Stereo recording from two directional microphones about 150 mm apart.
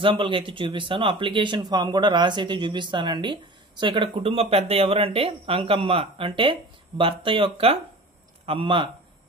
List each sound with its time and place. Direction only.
0.0 s speech: 35° right (ahead or behind)